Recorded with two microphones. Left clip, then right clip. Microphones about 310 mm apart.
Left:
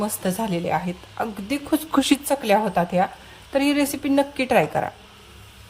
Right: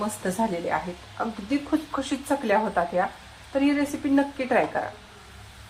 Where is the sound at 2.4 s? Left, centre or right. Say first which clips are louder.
Left 3 dB; left.